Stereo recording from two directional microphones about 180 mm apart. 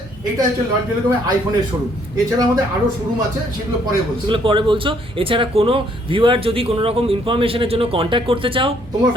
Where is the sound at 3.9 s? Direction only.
25° right (ahead or behind).